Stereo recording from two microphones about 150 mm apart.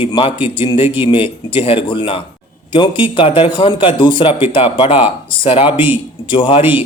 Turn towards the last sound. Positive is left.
turn(degrees=35)  # may be behind; listen again after turning